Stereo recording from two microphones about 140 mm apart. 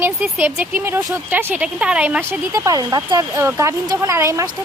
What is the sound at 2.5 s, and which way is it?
A woman's voice, 25° right (ahead or behind).